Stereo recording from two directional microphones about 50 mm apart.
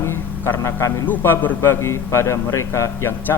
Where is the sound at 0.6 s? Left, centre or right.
Left.